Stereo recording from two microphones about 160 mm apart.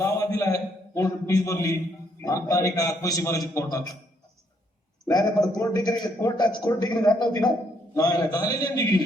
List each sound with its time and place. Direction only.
0.0 s a sound: 20° left (ahead or behind)
2.2 s a man's voice: 20° left (ahead or behind)
5.0 s a man's voice: 20° left (ahead or behind)